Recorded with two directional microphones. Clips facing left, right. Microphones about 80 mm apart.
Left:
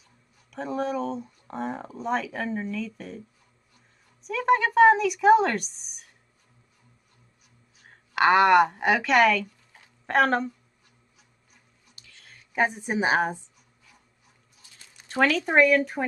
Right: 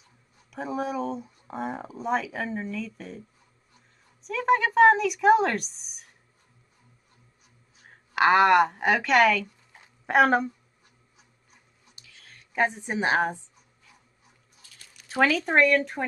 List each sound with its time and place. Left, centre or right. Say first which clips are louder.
0.5 s speech: left 1 dB; centre
7.8 s a woman's voice: even; centre
12.1 s a woman's voice: even; centre
14.6 s a sound: left 1 dB; left
15.0 s speech: even; centre